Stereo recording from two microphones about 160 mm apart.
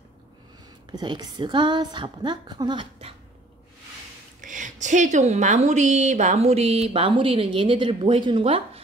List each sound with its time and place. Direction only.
0.9 s a woman's voice: 25° right (ahead or behind)
4.4 s a woman's voice: 50° right (ahead or behind); by 8.8 s 35° right (ahead or behind)